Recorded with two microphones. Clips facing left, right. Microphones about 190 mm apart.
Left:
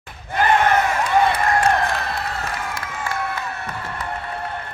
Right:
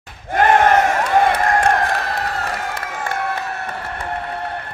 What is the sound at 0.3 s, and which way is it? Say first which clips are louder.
Crowd: right 4 dB; 45° right (ahead or behind).